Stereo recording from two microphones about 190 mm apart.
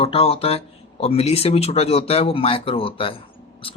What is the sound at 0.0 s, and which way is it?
Speech, 30° left (ahead or behind).